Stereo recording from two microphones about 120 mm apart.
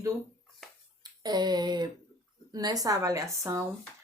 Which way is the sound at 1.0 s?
35° right (ahead or behind).